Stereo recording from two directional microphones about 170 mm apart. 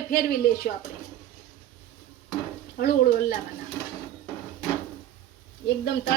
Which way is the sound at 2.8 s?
60° left (ahead or behind).